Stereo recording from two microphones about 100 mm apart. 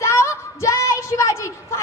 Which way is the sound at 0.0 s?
30° left (ahead or behind).